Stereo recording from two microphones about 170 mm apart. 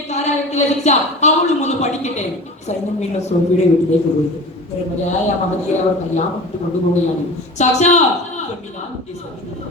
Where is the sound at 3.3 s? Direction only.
45° left (ahead or behind).